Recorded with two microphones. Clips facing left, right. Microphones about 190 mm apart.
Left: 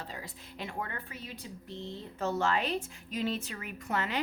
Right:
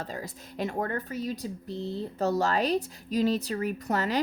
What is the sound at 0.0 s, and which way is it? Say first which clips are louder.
A woman's voice: right 7 dB; 45° right (ahead or behind).